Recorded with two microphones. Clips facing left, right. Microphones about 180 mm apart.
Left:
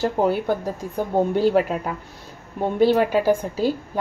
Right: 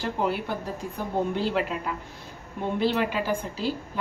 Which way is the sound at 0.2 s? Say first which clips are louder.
Left 6 dB; 50° left (ahead or behind).